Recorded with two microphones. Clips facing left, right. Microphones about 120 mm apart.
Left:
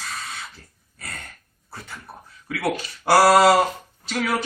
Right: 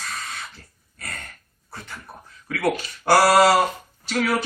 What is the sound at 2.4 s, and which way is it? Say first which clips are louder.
Speech: right 2 dB; 10° left (ahead or behind).